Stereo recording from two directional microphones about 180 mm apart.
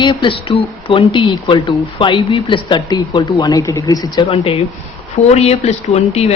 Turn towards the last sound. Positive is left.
turn(degrees=35)  # may be behind; listen again after turning